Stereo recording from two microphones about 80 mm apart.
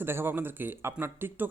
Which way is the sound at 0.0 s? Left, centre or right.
Right.